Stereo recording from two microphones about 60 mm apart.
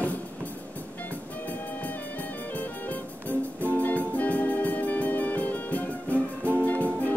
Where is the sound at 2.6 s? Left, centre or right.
Left.